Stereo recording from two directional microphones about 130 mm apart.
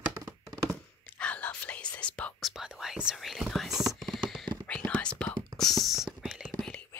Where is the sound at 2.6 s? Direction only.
5° right (ahead or behind).